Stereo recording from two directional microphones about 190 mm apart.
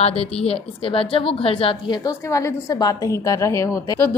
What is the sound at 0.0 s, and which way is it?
A woman's voice, 30° left (ahead or behind).